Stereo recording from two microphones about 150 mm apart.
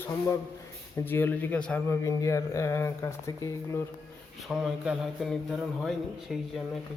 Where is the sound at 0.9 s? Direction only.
15° left (ahead or behind).